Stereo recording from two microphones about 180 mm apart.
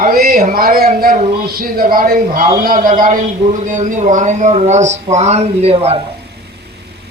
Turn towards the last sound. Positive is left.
turn(degrees=-35)  # may be behind; listen again after turning